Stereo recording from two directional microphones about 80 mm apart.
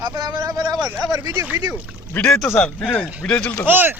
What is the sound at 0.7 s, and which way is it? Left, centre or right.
Speech, centre.